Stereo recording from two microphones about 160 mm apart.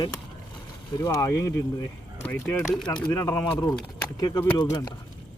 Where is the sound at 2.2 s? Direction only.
10° left (ahead or behind).